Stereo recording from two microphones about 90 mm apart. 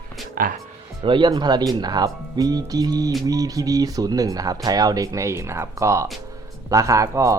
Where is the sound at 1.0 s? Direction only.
65° right (ahead or behind).